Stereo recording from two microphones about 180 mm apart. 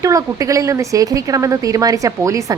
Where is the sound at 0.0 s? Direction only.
20° right (ahead or behind).